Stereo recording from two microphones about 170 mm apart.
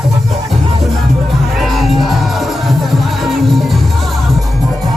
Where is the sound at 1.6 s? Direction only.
Centre (ahead or behind).